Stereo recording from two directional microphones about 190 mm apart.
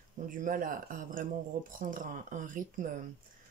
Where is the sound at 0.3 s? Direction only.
45° right (ahead or behind).